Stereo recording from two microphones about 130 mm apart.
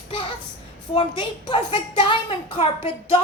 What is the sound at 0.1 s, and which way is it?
Child singing, 40° left (ahead or behind).